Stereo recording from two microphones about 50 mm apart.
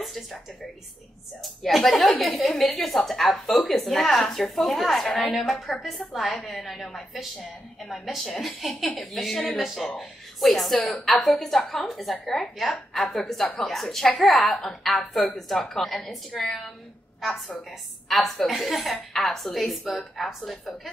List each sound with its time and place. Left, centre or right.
0.0 s speech: centre
1.4 s a woman's voice: centre
10.8 s a woman's voice: left
11.1 s a woman's voice: centre